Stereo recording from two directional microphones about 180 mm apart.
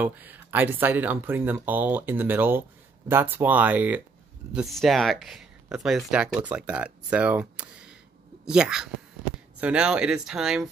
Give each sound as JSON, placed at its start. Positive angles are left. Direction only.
{"t": 0.0, "sound": "speech", "side_deg": -10}